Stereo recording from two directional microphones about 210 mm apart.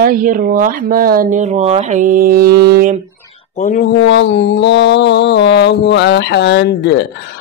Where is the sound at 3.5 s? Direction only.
35° left (ahead or behind).